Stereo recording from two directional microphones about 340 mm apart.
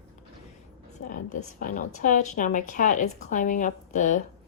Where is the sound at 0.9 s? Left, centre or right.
Left.